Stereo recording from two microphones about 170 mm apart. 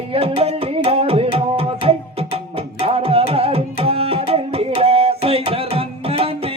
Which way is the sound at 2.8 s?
35° right (ahead or behind).